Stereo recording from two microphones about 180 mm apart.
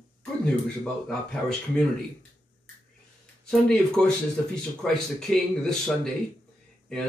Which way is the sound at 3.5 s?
5° left (ahead or behind).